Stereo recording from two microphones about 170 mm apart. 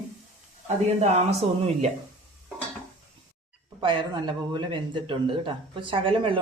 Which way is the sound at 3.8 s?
30° right (ahead or behind).